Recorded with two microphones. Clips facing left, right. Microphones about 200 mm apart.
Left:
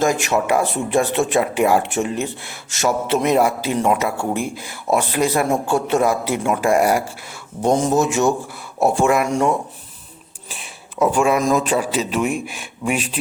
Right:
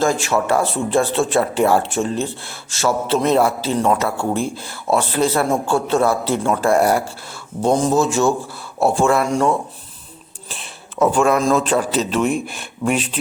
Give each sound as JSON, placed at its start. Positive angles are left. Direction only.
{"t": 0.0, "sound": "a man's voice", "side_deg": 20}
{"t": 10.5, "sound": "a sound", "side_deg": 10}
{"t": 11.4, "sound": "a man's voice", "side_deg": 10}